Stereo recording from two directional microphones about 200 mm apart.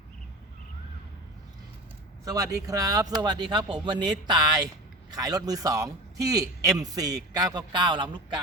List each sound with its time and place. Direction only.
2.2 s a man's voice: 15° right (ahead or behind)